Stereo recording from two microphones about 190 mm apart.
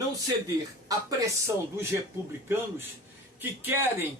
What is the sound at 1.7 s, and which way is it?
Speech, 10° right (ahead or behind).